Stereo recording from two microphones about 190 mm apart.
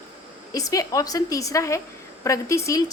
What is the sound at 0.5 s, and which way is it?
A woman's voice, 20° left (ahead or behind).